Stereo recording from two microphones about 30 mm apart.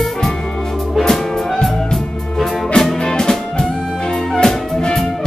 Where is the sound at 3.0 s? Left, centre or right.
Left.